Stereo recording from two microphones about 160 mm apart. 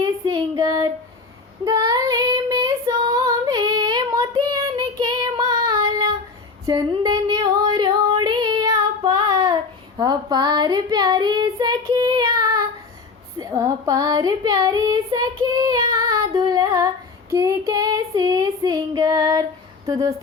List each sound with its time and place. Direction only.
0.0 s child singing: 25° right (ahead or behind)
5.2 s female singing: 25° right (ahead or behind)
6.7 s a sound: 25° right (ahead or behind)
8.3 s child singing: 25° right (ahead or behind)
19.9 s a woman's voice: 25° right (ahead or behind)